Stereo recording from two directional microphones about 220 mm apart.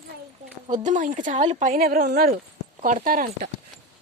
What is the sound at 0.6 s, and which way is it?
Speech, 30° right (ahead or behind).